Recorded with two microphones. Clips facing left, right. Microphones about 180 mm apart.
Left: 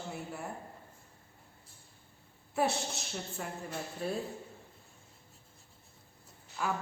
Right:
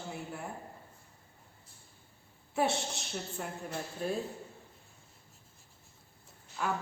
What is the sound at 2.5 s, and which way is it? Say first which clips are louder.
A woman's voice: even; centre (ahead or behind).